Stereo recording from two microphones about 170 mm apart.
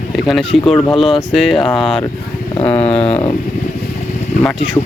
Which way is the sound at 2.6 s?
35° left (ahead or behind).